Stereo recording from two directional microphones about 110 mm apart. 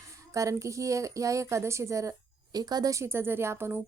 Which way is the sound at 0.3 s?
30° right (ahead or behind).